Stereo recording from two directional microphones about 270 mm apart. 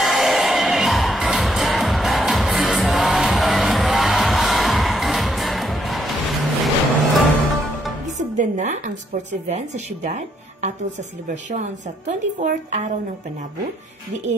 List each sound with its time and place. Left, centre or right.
0.0 s music: centre
8.4 s a sound: right
10.0 s a woman's voice: right